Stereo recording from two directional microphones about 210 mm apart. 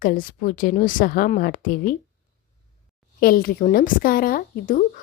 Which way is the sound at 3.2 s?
45° left (ahead or behind).